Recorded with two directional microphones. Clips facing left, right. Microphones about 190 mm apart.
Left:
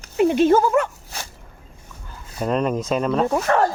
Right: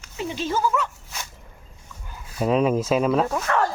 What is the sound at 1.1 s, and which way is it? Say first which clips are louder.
Fowl: left 1 dB; 35° left (ahead or behind).